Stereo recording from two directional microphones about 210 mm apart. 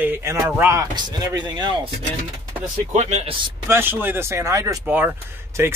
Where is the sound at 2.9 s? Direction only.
35° right (ahead or behind).